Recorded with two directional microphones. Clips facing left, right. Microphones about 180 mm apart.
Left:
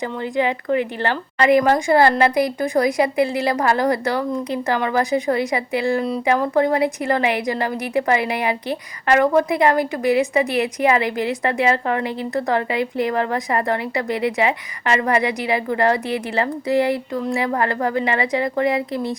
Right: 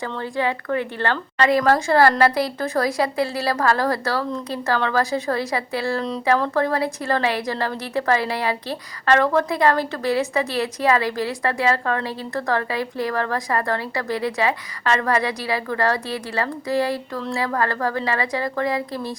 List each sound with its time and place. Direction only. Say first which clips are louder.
0.0 s a woman's voice: left 3 dB; 20° left (ahead or behind)